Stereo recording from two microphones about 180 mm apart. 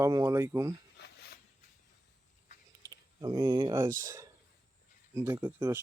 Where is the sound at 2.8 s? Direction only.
20° right (ahead or behind).